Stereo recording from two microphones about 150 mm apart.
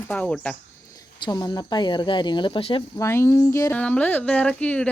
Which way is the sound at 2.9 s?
20° left (ahead or behind).